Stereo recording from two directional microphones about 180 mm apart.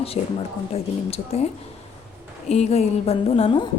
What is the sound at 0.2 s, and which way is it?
Speech, 40° left (ahead or behind).